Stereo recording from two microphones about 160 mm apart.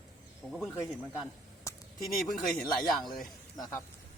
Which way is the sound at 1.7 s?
20° left (ahead or behind).